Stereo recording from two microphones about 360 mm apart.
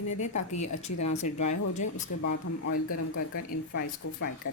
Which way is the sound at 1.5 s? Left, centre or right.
Centre.